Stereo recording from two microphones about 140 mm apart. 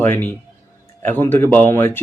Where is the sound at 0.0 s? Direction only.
15° left (ahead or behind).